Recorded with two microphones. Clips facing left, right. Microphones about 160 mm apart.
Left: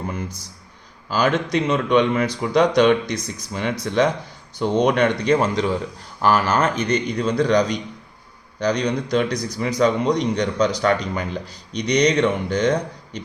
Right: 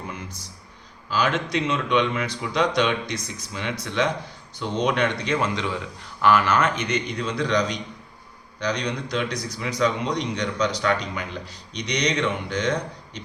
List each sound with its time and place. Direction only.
1.1 s a man's voice: 40° left (ahead or behind)